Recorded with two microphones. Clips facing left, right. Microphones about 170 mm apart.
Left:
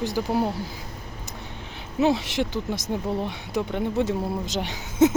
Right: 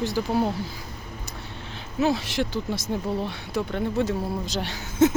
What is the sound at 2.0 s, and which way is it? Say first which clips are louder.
Speech: left 2 dB; 20° left (ahead or behind).